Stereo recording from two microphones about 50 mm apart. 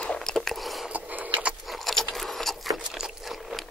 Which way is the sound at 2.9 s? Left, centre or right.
Centre.